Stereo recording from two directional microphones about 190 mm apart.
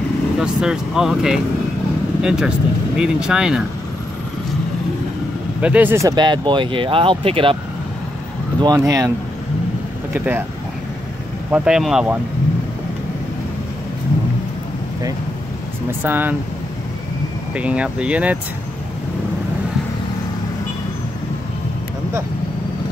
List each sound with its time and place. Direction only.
0.4 s speech: 5° right (ahead or behind)
5.6 s speech: 10° right (ahead or behind); by 7.5 s 30° right (ahead or behind)
8.5 s speech: 20° right (ahead or behind)
10.1 s speech: 10° right (ahead or behind)
11.5 s speech: 5° right (ahead or behind)
16.0 s speech: 10° right (ahead or behind)
17.6 s speech: 5° right (ahead or behind)